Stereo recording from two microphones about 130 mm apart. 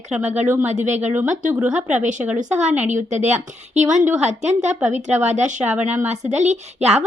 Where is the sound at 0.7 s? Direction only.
60° right (ahead or behind).